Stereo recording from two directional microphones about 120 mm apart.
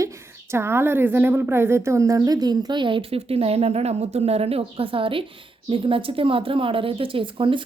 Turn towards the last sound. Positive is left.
turn(degrees=-45)  # may be behind; listen again after turning